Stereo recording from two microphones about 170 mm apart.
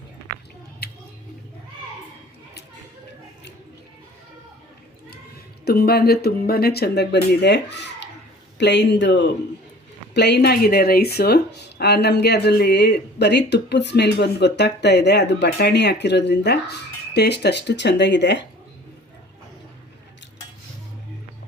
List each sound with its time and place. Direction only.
5.6 s speech: 65° left (ahead or behind); by 18.4 s 90° left